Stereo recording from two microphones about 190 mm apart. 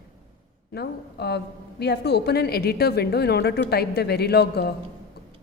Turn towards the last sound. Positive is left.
turn(degrees=60)  # may be behind; listen again after turning